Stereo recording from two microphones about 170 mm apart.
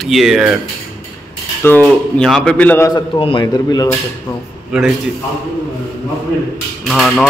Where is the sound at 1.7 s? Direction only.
15° left (ahead or behind).